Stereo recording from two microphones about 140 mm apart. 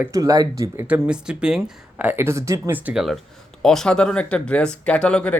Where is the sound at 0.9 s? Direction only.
5° right (ahead or behind).